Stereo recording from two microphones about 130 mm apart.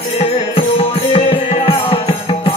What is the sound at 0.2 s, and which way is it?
Music, 50° left (ahead or behind).